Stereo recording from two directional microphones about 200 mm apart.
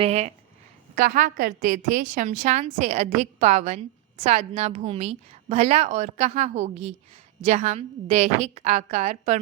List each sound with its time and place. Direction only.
0.0 s a woman's voice: 30° right (ahead or behind)